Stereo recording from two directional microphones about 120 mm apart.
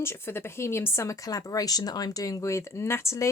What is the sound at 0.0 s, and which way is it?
Speech, 20° left (ahead or behind).